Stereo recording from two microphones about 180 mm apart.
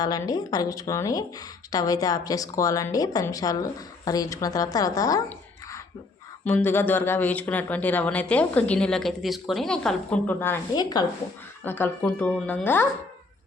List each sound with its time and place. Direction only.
0.0 s speech: 20° left (ahead or behind)
6.4 s speech: 10° left (ahead or behind)
10.8 s speech: 20° left (ahead or behind)
11.6 s speech: 10° left (ahead or behind)